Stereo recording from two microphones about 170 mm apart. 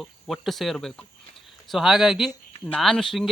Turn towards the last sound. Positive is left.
turn(degrees=0)  # may be behind; listen again after turning